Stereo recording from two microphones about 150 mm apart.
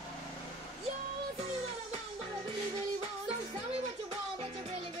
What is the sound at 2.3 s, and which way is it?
Music, 30° right (ahead or behind).